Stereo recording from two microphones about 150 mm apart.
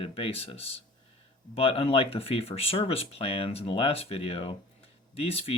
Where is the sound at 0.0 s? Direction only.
40° left (ahead or behind).